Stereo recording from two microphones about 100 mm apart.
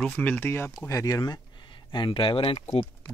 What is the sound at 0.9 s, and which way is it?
Speech, 35° left (ahead or behind).